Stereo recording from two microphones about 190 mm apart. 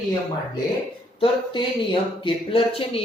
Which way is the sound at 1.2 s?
25° left (ahead or behind).